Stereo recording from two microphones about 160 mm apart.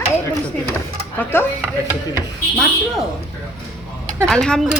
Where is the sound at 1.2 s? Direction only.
15° left (ahead or behind).